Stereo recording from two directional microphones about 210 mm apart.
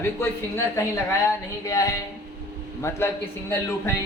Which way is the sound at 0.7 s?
15° left (ahead or behind).